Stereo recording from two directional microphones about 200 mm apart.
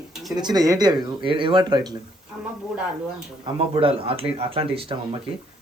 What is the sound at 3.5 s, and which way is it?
Speech, 25° right (ahead or behind).